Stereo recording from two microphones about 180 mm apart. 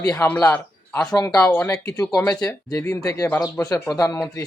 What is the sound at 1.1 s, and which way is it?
A man's voice, 20° left (ahead or behind).